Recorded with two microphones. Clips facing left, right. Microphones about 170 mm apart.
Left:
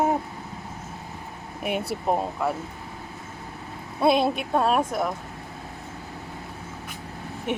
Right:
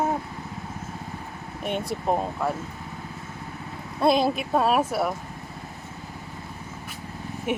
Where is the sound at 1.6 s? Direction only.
5° left (ahead or behind).